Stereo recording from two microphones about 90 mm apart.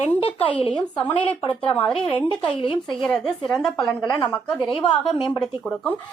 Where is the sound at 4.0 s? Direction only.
50° left (ahead or behind).